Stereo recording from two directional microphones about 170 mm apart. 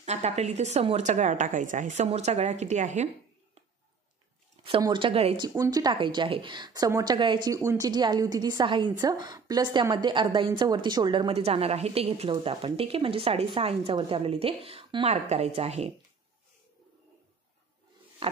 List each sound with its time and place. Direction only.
0.0 s a woman's voice: 40° right (ahead or behind)
4.6 s speech: 30° right (ahead or behind)
5.6 s speech: 20° right (ahead or behind); by 15.9 s 40° right (ahead or behind)
18.2 s a sound: 35° right (ahead or behind)